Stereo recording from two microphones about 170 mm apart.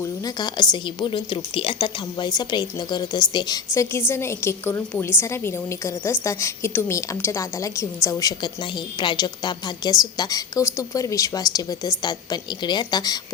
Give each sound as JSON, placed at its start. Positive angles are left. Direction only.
{"t": 0.0, "sound": "a woman's voice", "side_deg": 25}